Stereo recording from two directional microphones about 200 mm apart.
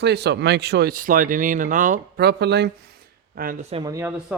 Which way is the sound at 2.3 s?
55° right (ahead or behind).